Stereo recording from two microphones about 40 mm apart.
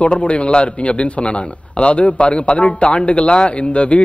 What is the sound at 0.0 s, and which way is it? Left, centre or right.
A man's voice, left.